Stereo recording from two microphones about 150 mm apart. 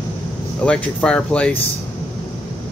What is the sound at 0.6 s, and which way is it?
Speech, 5° left (ahead or behind).